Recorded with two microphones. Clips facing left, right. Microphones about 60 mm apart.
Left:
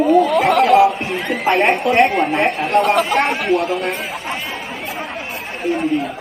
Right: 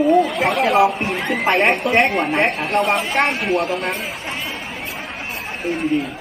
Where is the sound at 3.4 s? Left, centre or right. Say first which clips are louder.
Left 2 dB; centre.